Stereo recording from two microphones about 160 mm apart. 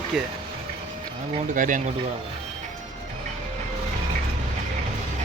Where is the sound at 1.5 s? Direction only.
55° right (ahead or behind).